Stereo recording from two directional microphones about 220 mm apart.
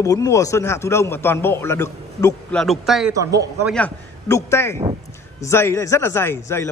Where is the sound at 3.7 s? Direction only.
10° left (ahead or behind).